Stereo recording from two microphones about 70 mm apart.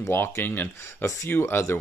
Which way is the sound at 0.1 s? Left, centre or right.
Left.